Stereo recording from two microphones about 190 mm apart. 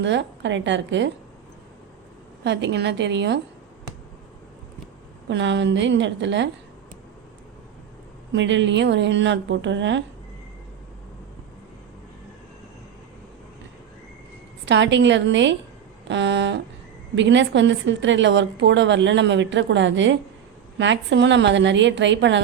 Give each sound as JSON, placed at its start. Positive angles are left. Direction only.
{"t": 0.0, "sound": "a woman's voice", "side_deg": -70}
{"t": 2.4, "sound": "a woman's voice", "side_deg": -65}
{"t": 5.3, "sound": "a woman's voice", "side_deg": -70}
{"t": 8.3, "sound": "a woman's voice", "side_deg": -75}
{"t": 14.6, "sound": "a woman's voice", "side_deg": -70}